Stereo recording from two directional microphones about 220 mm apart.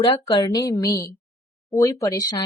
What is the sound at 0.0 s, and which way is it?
A woman's voice, 20° left (ahead or behind).